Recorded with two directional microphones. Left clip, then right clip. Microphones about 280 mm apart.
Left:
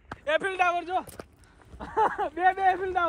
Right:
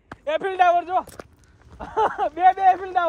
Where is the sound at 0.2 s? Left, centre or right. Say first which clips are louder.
Right 5 dB; right.